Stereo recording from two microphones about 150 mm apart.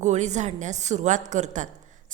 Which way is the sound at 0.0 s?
50° right (ahead or behind).